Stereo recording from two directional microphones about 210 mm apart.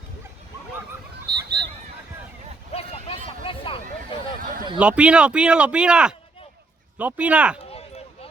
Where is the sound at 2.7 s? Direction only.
30° left (ahead or behind).